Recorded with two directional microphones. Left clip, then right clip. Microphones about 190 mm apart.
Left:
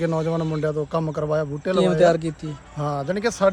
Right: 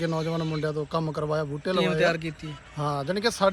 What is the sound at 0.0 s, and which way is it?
Speech, 5° left (ahead or behind).